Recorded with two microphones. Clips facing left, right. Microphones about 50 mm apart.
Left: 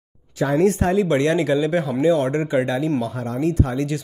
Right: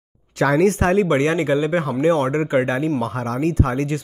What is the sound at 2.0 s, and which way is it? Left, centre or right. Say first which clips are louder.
Speech: right 1 dB; right.